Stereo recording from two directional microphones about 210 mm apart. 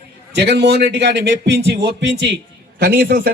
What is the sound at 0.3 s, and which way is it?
A man's voice, 55° right (ahead or behind).